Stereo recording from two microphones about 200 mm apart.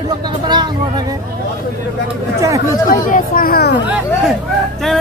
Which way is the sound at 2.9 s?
45° left (ahead or behind).